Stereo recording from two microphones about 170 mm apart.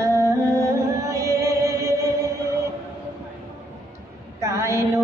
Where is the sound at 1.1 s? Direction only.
20° right (ahead or behind).